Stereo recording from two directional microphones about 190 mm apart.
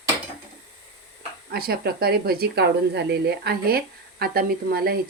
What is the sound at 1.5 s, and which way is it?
Speech, 55° right (ahead or behind).